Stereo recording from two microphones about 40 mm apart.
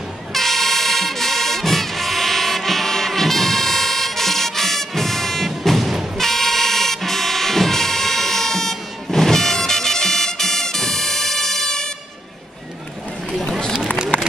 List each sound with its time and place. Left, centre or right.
0.3 s music: centre
6.1 s vehicle: centre
14.1 s run: left